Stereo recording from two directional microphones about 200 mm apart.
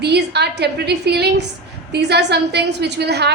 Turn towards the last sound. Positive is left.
turn(degrees=-55)  # may be behind; listen again after turning